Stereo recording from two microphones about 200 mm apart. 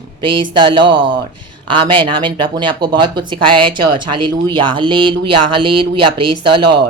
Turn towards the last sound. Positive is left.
turn(degrees=-25)  # may be behind; listen again after turning